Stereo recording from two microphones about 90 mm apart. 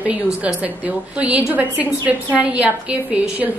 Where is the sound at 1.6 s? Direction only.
15° right (ahead or behind).